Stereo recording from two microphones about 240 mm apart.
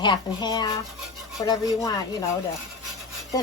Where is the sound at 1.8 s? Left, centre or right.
Centre.